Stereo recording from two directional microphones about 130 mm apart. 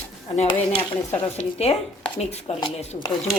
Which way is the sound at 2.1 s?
50° left (ahead or behind).